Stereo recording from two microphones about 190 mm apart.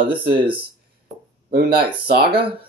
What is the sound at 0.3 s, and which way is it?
Speech, 25° right (ahead or behind).